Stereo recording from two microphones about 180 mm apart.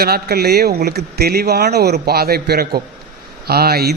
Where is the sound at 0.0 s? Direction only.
60° right (ahead or behind).